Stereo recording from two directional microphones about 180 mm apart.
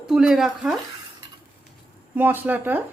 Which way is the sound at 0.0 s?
5° right (ahead or behind).